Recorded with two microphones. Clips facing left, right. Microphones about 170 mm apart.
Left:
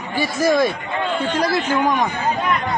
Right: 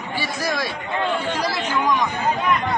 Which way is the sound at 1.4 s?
55° left (ahead or behind).